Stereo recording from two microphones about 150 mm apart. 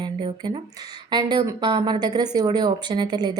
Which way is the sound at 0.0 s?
30° right (ahead or behind).